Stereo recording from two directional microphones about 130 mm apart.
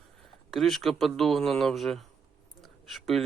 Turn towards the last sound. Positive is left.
turn(degrees=0)  # may be behind; listen again after turning